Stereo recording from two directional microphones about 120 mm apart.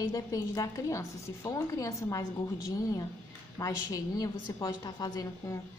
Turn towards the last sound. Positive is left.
turn(degrees=30)  # may be behind; listen again after turning